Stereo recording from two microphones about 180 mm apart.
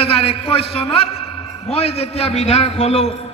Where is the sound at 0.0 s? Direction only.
30° left (ahead or behind).